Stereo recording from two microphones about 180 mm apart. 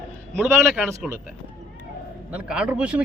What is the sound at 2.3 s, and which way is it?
Speech, 5° right (ahead or behind).